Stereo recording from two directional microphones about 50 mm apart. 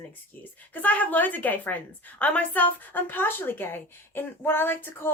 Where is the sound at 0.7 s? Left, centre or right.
Left.